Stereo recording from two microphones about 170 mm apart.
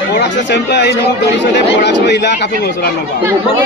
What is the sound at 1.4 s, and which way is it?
Speech, 90° left.